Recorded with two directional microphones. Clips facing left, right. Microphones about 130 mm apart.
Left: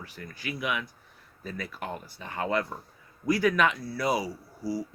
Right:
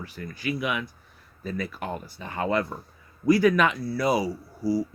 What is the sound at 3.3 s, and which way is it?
Speech, 5° right (ahead or behind).